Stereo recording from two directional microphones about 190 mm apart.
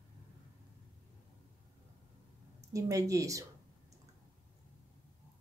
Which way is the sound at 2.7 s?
15° right (ahead or behind).